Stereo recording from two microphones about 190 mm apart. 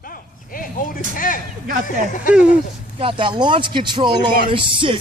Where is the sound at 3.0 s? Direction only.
25° right (ahead or behind).